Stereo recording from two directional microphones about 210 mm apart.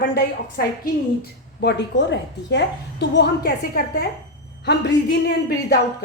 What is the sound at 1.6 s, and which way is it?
A woman's voice, 55° left (ahead or behind).